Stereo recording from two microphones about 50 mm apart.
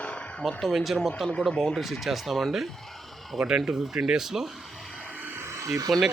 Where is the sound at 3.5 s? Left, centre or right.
Right.